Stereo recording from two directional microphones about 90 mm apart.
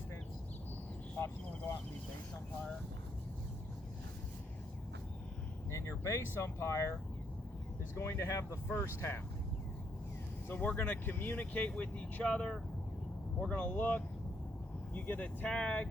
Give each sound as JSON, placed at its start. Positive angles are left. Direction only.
{"t": 5.7, "sound": "speech", "side_deg": 35}
{"t": 7.9, "sound": "speech", "side_deg": 30}
{"t": 8.6, "sound": "speech", "side_deg": 25}
{"t": 10.5, "sound": "speech", "side_deg": 20}